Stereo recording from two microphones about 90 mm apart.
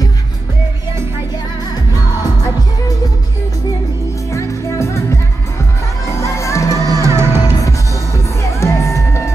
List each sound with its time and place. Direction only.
4.3 s music: 35° left (ahead or behind)
6.8 s music: 40° right (ahead or behind)
7.6 s music: 35° left (ahead or behind)